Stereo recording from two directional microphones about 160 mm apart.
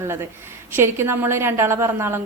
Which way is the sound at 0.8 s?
15° right (ahead or behind).